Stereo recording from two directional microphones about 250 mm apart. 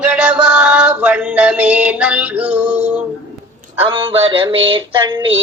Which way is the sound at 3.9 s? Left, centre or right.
Right.